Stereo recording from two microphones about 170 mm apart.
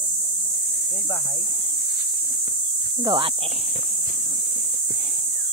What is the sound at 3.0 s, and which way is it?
Speech, 25° right (ahead or behind).